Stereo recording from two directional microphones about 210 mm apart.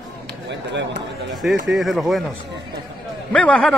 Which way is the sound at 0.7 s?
55° right (ahead or behind).